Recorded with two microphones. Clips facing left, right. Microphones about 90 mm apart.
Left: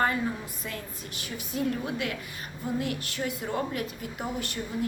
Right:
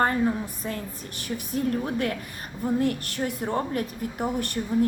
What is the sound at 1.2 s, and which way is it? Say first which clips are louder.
A woman's voice: right 3 dB; 45° right (ahead or behind).